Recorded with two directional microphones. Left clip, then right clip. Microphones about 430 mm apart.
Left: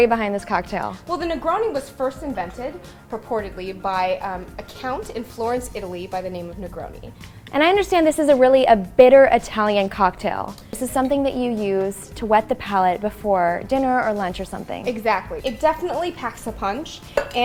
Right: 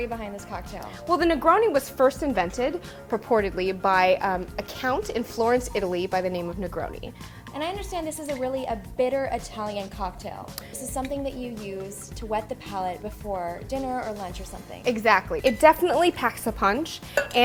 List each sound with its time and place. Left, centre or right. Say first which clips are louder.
0.0 s a woman's voice: left 14 dB; left
1.1 s a woman's voice: right 3 dB; right
7.5 s a woman's voice: left 14 dB; left
14.0 s a woman's voice: left 11 dB; centre
14.8 s a woman's voice: right 1 dB; right